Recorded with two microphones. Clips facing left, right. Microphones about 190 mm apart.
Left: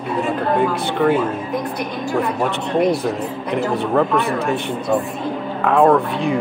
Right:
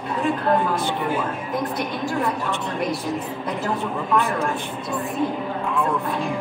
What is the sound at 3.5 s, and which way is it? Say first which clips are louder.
Speech: left 9 dB; 75° left (ahead or behind).